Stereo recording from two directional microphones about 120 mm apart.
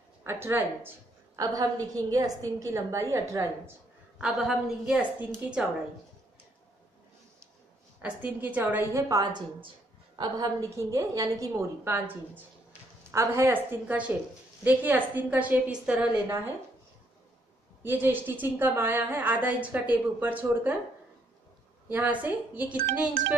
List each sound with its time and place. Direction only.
0.2 s a woman's voice: 20° right (ahead or behind)
1.3 s a woman's voice: 30° right (ahead or behind)
4.2 s a woman's voice: 5° right (ahead or behind)
8.0 s a woman's voice: 15° right (ahead or behind)
9.1 s a woman's voice: 35° right (ahead or behind); by 16.2 s 10° right (ahead or behind)
17.8 s a woman's voice: 15° right (ahead or behind)
21.8 s a woman's voice: 15° right (ahead or behind)